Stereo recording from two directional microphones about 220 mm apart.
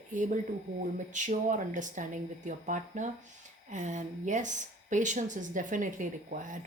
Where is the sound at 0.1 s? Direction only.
35° right (ahead or behind).